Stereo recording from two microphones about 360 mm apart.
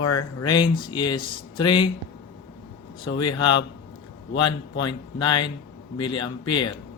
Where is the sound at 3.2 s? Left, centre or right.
Left.